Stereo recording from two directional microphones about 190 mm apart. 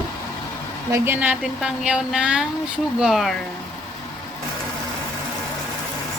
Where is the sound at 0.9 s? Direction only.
10° right (ahead or behind).